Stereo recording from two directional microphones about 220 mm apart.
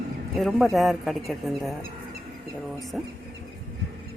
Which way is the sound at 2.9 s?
Centre (ahead or behind).